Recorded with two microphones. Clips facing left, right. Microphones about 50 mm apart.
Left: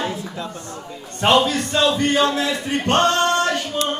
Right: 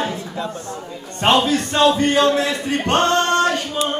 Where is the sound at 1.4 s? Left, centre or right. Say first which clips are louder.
Right 2 dB; right.